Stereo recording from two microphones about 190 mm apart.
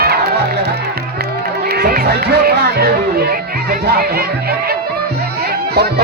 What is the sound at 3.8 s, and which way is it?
Speech, 55° right (ahead or behind).